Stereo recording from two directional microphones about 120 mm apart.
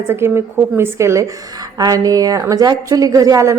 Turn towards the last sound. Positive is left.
turn(degrees=-25)  # may be behind; listen again after turning